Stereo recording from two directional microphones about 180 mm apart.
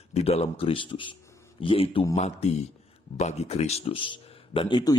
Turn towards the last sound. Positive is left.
turn(degrees=25)  # may be behind; listen again after turning